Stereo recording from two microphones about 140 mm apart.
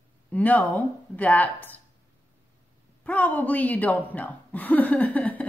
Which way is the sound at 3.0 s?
10° left (ahead or behind).